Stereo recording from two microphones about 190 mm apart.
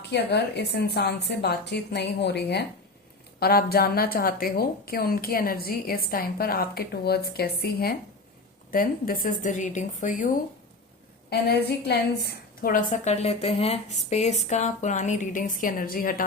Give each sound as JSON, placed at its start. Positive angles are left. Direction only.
{"t": 0.1, "sound": "a woman's voice", "side_deg": 60}
{"t": 11.3, "sound": "a woman's voice", "side_deg": 60}